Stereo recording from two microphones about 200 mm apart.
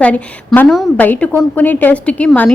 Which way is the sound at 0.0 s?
5° left (ahead or behind).